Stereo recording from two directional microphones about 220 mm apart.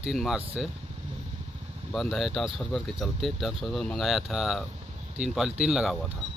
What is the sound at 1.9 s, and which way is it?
Speech, centre (ahead or behind).